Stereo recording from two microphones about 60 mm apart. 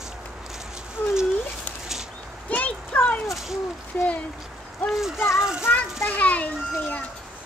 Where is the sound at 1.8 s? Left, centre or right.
Centre.